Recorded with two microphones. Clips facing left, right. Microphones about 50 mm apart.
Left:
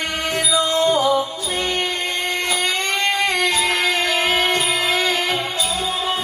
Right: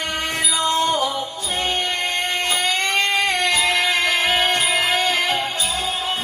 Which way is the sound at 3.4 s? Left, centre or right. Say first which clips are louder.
Even; right.